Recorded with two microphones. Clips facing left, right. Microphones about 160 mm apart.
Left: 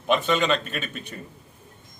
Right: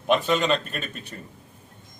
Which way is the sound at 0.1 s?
Centre (ahead or behind).